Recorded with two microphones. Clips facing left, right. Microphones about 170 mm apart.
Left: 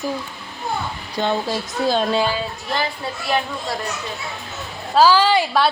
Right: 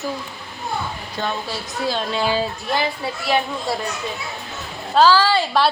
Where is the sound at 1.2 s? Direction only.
15° left (ahead or behind).